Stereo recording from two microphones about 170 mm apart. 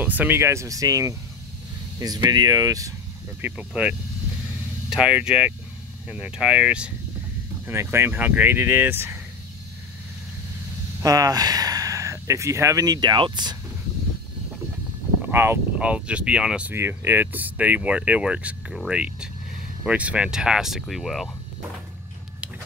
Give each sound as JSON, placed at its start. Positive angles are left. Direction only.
{"t": 0.0, "sound": "speech", "side_deg": -10}
{"t": 3.3, "sound": "speech", "side_deg": -10}
{"t": 11.0, "sound": "speech", "side_deg": -20}
{"t": 15.2, "sound": "speech", "side_deg": -15}